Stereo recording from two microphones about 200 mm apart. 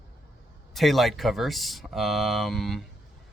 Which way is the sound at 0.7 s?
Centre (ahead or behind).